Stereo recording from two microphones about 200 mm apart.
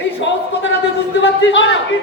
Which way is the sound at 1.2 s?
65° left (ahead or behind).